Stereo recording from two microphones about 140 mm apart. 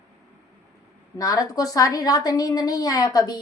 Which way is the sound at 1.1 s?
25° left (ahead or behind).